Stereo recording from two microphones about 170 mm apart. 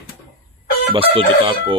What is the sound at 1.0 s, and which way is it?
Speech, 35° right (ahead or behind).